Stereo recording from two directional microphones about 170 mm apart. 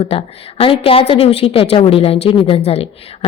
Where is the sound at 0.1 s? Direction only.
35° left (ahead or behind).